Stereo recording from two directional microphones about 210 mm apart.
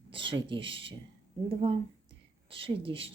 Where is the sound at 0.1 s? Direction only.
25° right (ahead or behind).